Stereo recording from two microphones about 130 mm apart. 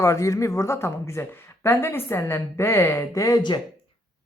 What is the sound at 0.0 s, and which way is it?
Speech, 25° left (ahead or behind).